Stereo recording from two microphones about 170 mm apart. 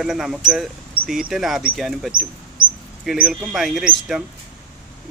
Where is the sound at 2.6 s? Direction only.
55° right (ahead or behind).